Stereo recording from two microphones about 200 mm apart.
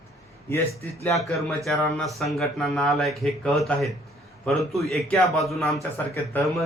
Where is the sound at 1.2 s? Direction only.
Centre (ahead or behind).